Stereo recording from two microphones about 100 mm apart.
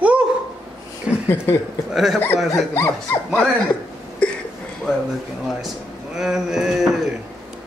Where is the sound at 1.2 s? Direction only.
20° left (ahead or behind).